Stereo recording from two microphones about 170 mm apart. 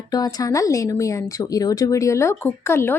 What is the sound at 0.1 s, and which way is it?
A woman's voice, 20° left (ahead or behind).